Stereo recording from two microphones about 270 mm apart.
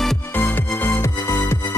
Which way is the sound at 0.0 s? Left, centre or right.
Centre.